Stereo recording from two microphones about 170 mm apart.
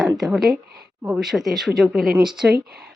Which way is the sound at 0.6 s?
65° right (ahead or behind).